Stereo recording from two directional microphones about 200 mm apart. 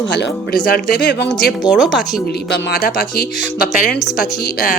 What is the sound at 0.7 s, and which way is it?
Speech, 50° left (ahead or behind).